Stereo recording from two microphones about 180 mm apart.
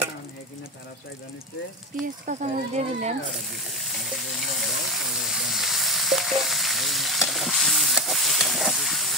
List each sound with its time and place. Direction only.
2.2 s speech: 40° right (ahead or behind)
4.0 s steam: centre (ahead or behind)